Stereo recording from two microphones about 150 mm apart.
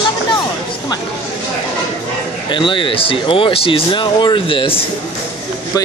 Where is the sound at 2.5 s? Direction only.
30° left (ahead or behind).